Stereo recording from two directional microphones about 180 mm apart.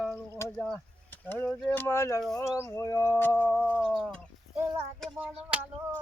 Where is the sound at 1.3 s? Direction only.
5° left (ahead or behind).